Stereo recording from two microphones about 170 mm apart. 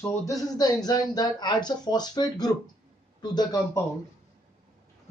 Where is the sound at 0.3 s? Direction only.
20° left (ahead or behind).